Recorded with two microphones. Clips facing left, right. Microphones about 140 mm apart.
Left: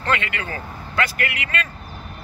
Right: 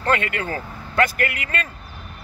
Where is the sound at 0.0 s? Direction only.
45° right (ahead or behind).